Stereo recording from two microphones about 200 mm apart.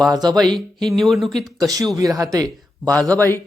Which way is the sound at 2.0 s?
15° right (ahead or behind).